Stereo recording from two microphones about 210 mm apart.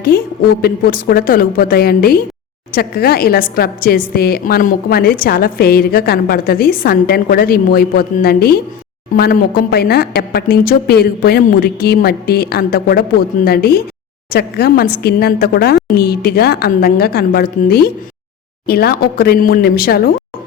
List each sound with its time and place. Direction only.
0.1 s a woman's voice: 45° left (ahead or behind)